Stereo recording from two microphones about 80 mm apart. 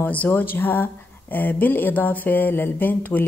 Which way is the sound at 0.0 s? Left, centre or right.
Left.